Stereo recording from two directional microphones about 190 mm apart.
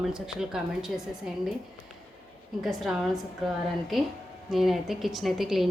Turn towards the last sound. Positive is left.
turn(degrees=0)  # may be behind; listen again after turning